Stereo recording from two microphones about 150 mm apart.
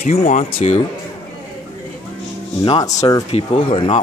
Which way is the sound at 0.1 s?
45° left (ahead or behind).